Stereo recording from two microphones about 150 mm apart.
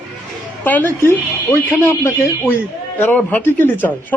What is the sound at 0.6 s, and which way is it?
Speech, 15° left (ahead or behind).